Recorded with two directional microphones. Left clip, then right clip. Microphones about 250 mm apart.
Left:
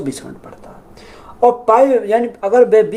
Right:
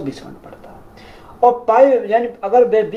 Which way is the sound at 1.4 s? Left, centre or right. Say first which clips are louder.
Left 1 dB; left.